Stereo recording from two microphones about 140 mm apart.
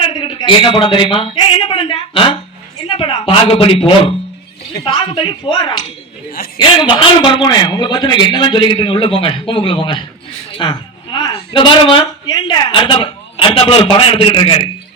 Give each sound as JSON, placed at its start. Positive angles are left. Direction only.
{"t": 0.0, "sound": "a man's voice", "side_deg": 35}